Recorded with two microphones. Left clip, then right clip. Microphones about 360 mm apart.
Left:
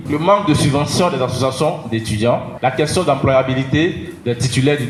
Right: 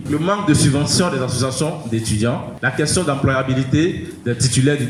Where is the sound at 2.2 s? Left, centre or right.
Centre.